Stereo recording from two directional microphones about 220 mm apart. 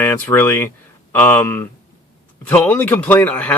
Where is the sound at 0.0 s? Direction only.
10° left (ahead or behind).